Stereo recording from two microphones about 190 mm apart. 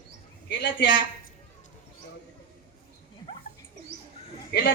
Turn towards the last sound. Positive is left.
turn(degrees=60)  # may be behind; listen again after turning